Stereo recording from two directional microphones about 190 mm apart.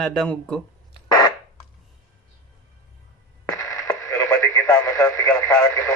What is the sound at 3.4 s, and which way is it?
Radio, 15° left (ahead or behind).